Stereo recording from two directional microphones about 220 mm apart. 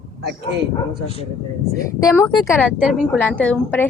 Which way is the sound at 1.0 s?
25° left (ahead or behind).